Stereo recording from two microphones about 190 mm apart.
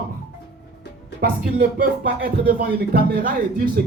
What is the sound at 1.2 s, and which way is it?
Speech, 50° right (ahead or behind).